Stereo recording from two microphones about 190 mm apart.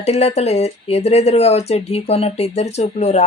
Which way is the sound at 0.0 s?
35° left (ahead or behind).